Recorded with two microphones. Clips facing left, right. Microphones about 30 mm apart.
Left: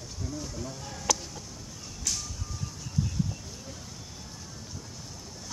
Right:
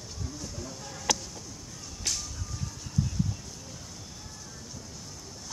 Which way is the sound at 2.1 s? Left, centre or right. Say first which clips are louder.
Even; right.